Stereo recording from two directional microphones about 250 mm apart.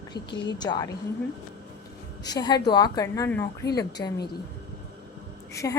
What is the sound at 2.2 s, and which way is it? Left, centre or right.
A woman's voice, centre.